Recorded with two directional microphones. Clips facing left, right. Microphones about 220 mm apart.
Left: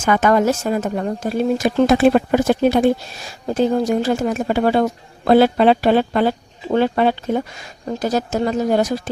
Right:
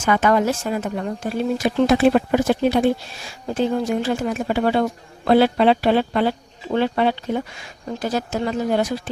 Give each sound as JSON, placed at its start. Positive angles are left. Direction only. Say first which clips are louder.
{"t": 0.0, "sound": "a woman's voice", "louder": "left 2 dB", "side_deg": 45}